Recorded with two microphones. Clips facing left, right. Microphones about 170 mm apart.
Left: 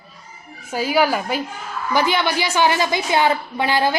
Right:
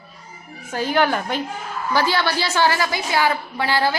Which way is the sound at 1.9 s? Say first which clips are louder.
Left 1 dB; 15° left (ahead or behind).